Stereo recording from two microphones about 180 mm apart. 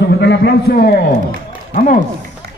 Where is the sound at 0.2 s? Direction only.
65° left (ahead or behind).